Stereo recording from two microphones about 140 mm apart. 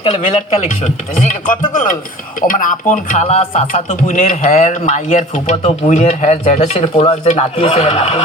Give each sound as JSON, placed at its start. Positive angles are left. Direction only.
{"t": 0.2, "sound": "speech", "side_deg": 55}